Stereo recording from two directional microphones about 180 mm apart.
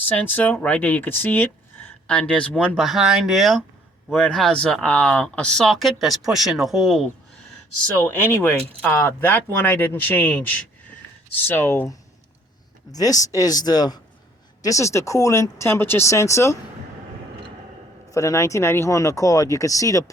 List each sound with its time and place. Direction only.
0.2 s speech: 10° left (ahead or behind)
7.9 s speech: 10° left (ahead or behind)
18.1 s speech: 20° left (ahead or behind)